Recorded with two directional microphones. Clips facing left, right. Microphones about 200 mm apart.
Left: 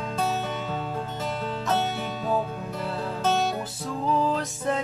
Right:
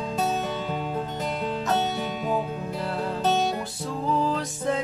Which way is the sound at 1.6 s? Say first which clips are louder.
Even; 15° right (ahead or behind).